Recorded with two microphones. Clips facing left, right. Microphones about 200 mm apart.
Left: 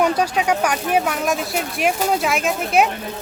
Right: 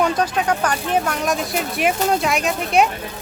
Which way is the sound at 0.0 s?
10° left (ahead or behind).